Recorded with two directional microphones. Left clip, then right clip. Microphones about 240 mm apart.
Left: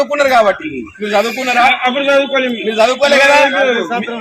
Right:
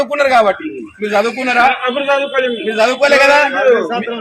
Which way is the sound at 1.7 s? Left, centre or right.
Left.